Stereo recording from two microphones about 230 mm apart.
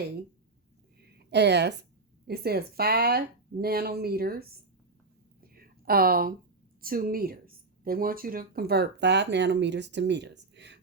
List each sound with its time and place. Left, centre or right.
1.0 s a woman's voice: right
5.4 s a sound: right
6.8 s speech: right